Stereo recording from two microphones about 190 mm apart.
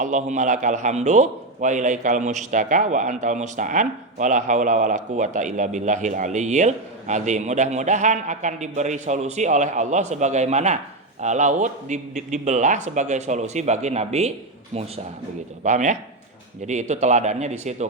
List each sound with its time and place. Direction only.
0.0 s a man's voice: 40° right (ahead or behind)
15.6 s a man's voice: 40° right (ahead or behind)